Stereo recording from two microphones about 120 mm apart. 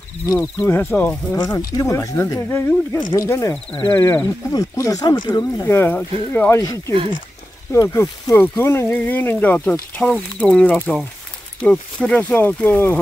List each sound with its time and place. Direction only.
0.4 s speech: 15° left (ahead or behind)
1.4 s speech: 35° left (ahead or behind)
5.7 s speech: 20° left (ahead or behind)
7.7 s speech: 25° left (ahead or behind)